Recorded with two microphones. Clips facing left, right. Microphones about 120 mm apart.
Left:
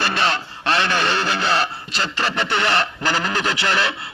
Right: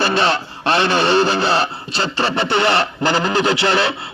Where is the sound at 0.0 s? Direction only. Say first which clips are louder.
Right 5 dB; 30° right (ahead or behind).